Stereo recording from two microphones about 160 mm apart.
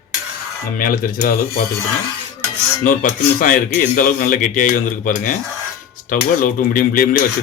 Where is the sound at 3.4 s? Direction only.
55° left (ahead or behind).